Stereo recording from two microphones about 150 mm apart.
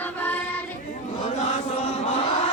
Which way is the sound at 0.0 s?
10° left (ahead or behind).